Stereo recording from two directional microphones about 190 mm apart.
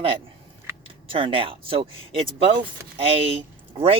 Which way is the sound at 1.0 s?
30° right (ahead or behind).